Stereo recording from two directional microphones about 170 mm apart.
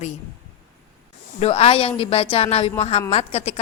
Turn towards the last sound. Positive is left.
turn(degrees=40)  # may be behind; listen again after turning